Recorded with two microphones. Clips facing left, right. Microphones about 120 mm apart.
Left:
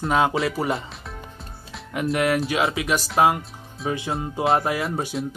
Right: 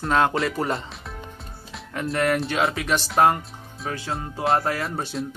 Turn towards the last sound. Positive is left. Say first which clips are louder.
# left 2 dB
turn(degrees=5)  # may be behind; listen again after turning